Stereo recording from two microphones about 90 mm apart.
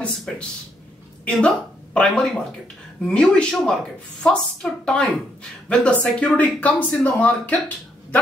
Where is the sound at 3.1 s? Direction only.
10° left (ahead or behind).